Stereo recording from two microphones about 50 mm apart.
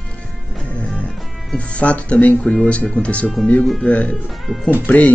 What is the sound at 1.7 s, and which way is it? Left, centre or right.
Speech, left.